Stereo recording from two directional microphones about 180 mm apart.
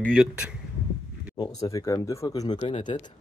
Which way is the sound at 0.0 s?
Centre (ahead or behind).